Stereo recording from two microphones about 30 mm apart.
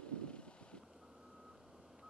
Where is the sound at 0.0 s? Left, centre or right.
Left.